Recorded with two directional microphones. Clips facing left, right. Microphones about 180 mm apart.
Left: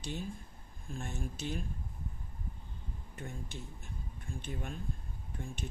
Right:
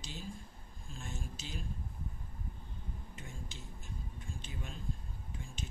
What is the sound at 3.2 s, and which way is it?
Speech, 60° left (ahead or behind).